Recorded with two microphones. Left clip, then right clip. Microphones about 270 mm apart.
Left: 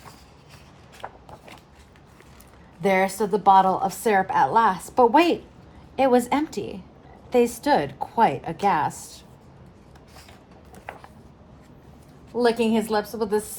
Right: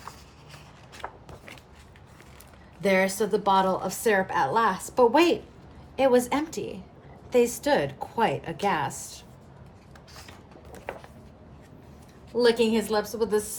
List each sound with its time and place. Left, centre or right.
1.0 s shuffling cards: centre
2.8 s a woman's voice: centre
12.4 s a woman's voice: centre